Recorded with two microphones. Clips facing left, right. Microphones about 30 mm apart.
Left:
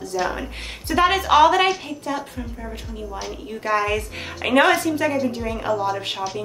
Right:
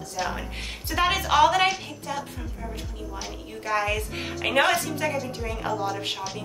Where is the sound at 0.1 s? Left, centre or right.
Centre.